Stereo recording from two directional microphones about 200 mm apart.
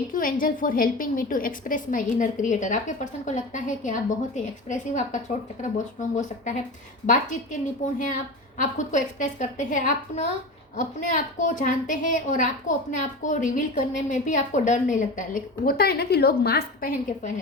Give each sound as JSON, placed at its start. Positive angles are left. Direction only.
{"t": 0.1, "sound": "a woman's voice", "side_deg": 45}